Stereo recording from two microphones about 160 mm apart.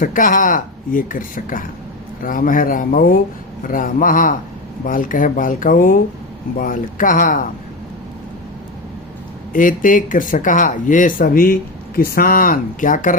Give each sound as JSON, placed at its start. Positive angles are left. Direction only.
{"t": 0.0, "sound": "speech", "side_deg": 55}
{"t": 9.5, "sound": "speech", "side_deg": 55}